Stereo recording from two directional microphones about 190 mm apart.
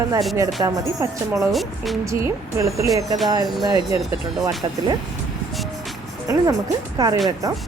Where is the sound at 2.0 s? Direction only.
15° right (ahead or behind).